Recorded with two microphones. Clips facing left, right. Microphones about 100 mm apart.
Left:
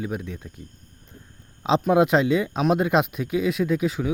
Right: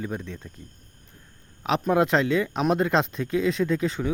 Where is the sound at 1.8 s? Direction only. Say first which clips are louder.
Left 2 dB; 15° left (ahead or behind).